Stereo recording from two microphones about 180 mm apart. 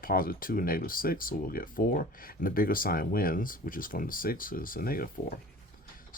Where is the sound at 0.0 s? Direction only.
55° left (ahead or behind).